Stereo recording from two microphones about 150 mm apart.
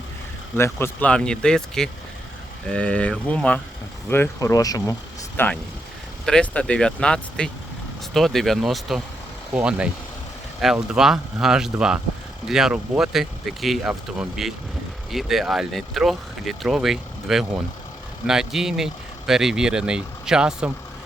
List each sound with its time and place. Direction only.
0.5 s speech: 15° left (ahead or behind); by 20.7 s 5° right (ahead or behind)